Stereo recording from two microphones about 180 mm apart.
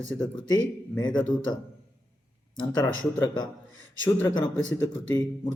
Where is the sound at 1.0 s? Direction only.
25° left (ahead or behind).